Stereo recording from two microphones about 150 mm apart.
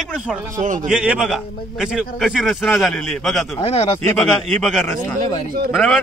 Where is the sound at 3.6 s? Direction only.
40° left (ahead or behind).